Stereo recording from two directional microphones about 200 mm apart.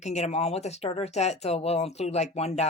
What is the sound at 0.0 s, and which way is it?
Speech, 35° left (ahead or behind).